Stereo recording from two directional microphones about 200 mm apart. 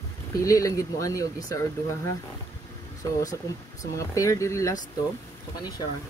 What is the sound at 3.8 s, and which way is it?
Speech, 15° left (ahead or behind).